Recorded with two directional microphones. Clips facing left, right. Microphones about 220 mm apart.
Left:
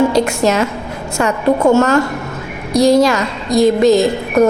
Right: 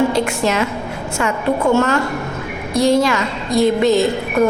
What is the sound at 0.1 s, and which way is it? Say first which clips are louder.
A woman's voice: left 4 dB; 40° left (ahead or behind).